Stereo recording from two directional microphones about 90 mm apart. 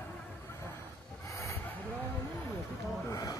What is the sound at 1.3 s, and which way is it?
Vehicle, 35° left (ahead or behind).